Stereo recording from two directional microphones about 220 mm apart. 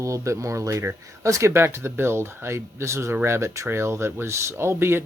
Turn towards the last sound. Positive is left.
turn(degrees=-10)  # may be behind; listen again after turning